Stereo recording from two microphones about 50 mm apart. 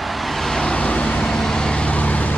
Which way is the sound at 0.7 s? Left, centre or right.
Left.